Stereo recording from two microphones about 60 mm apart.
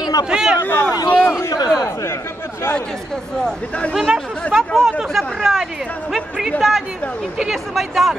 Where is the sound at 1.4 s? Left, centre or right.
Left.